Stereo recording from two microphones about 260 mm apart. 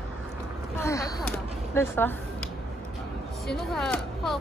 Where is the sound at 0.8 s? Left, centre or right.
Centre.